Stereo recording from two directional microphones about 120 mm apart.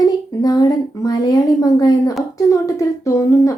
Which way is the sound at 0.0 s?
30° left (ahead or behind).